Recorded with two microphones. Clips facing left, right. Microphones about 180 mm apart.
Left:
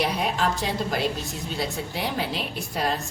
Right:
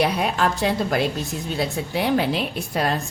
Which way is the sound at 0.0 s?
60° right (ahead or behind).